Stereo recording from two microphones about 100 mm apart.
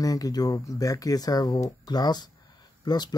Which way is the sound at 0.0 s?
35° left (ahead or behind).